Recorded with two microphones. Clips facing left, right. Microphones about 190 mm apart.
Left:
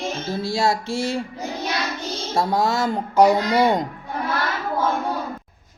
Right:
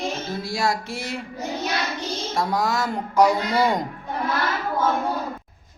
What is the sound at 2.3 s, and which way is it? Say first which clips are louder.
Mantra: left 3 dB; 25° left (ahead or behind).